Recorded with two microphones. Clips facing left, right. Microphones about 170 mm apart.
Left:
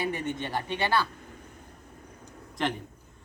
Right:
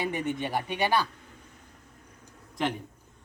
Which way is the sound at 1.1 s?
55° left (ahead or behind).